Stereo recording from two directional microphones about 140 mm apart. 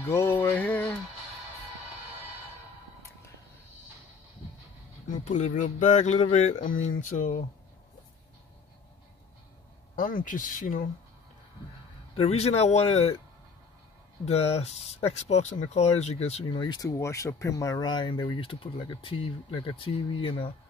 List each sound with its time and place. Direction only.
0.1 s a sound: 20° left (ahead or behind)
5.0 s speech: 65° left (ahead or behind)
9.9 s speech: 80° left
12.2 s speech: 50° left (ahead or behind)
14.2 s speech: 50° left (ahead or behind)
16.5 s speech: 30° left (ahead or behind)